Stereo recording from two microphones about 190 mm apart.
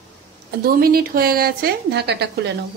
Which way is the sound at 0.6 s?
50° right (ahead or behind).